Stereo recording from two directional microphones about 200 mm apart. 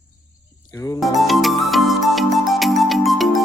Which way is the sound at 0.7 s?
15° left (ahead or behind).